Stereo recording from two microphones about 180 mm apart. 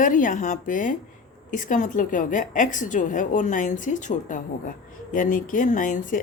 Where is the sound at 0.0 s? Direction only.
45° left (ahead or behind).